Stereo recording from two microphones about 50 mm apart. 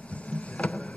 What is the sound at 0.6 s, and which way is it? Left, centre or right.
Vehicle, left.